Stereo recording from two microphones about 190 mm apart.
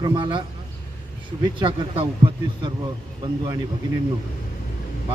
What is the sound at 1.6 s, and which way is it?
A man's voice, 25° right (ahead or behind).